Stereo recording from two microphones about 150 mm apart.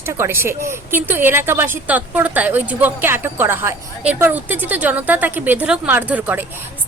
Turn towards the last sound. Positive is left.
turn(degrees=-10)  # may be behind; listen again after turning